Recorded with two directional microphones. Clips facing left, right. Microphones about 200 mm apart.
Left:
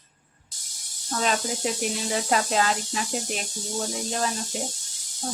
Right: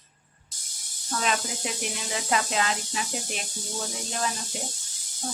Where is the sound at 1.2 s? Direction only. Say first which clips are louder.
Left 4 dB; 35° left (ahead or behind).